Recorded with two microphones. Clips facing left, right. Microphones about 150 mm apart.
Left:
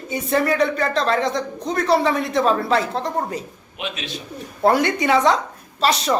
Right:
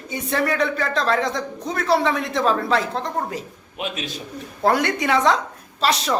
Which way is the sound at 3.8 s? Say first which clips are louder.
Right 1 dB; 40° right (ahead or behind).